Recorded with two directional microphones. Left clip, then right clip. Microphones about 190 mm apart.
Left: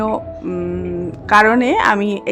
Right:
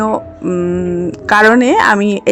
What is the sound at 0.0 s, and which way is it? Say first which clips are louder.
Music: right 4 dB; 25° right (ahead or behind).